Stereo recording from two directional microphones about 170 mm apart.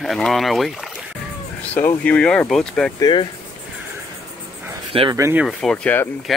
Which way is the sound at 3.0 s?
30° left (ahead or behind).